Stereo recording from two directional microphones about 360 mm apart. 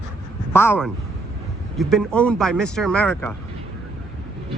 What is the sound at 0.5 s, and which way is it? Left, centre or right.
Speech, centre.